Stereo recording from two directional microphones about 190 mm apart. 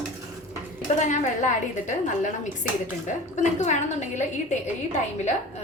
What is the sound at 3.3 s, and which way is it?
A woman's voice, 40° left (ahead or behind).